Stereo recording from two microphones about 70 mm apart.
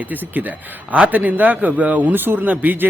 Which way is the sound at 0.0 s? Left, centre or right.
Right.